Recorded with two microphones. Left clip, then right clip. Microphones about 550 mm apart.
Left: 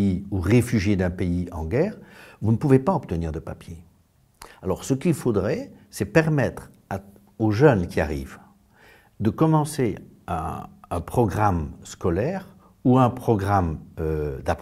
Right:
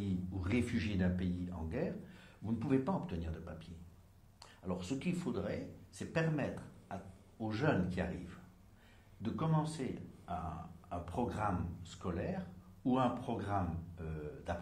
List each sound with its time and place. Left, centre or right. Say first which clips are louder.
0.0 s speech: left 16 dB; left